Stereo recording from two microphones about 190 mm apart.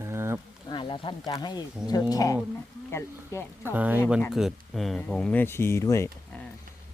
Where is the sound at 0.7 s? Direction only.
25° left (ahead or behind).